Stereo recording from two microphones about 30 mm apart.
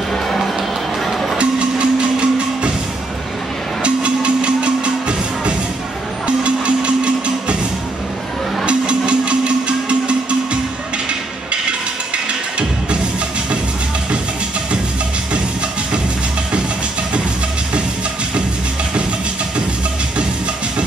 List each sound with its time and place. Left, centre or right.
1.4 s music: right
3.8 s music: right
8.6 s a sound: right
12.3 s music: right